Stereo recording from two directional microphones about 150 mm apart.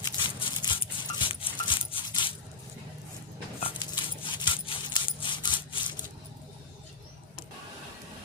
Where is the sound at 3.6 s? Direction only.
30° left (ahead or behind).